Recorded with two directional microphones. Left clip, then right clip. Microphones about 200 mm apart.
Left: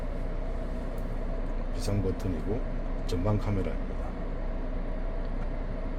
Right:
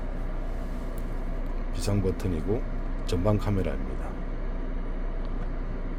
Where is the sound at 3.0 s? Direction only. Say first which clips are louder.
Right 5 dB; 25° right (ahead or behind).